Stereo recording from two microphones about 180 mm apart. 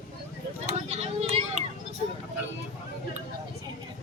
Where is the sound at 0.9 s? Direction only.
40° right (ahead or behind).